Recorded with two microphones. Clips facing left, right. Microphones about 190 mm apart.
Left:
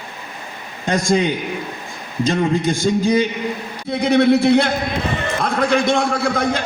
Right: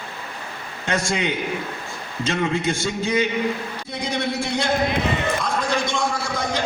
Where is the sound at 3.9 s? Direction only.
60° left (ahead or behind).